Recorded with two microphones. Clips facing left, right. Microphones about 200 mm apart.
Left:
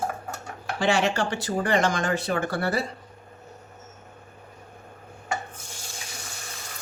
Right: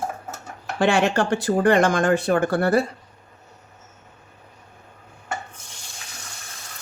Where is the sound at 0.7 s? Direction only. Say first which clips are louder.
Right 4 dB; 55° right (ahead or behind).